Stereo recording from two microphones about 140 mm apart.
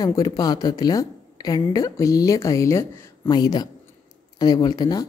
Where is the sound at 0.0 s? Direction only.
25° left (ahead or behind).